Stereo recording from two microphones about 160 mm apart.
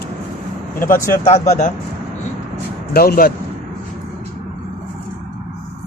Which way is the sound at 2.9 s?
70° left (ahead or behind).